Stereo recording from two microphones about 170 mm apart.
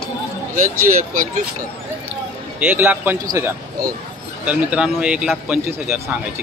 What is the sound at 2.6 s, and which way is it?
A man's voice, 10° right (ahead or behind).